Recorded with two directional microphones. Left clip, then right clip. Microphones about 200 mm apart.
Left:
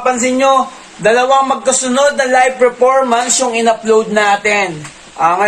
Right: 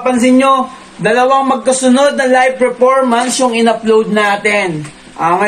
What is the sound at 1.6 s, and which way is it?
A man's voice, 10° left (ahead or behind).